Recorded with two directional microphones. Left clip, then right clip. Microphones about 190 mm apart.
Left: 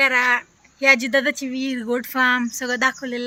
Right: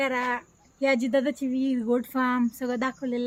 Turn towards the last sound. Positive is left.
turn(degrees=-20)  # may be behind; listen again after turning